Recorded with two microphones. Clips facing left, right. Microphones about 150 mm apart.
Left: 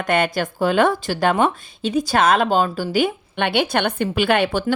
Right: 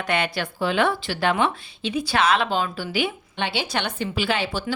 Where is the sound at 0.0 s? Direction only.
45° left (ahead or behind).